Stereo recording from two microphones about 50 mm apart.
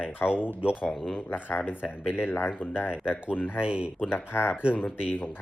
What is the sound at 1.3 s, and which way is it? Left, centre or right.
Speech, left.